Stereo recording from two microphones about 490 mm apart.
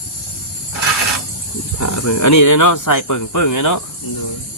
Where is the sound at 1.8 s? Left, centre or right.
Left.